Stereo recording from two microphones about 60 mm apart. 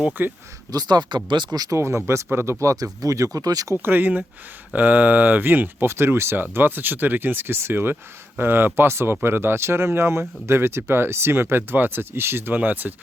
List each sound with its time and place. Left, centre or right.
0.2 s speech: right
0.7 s speech: right
1.8 s speech: right
3.3 s speech: right
3.8 s speech: right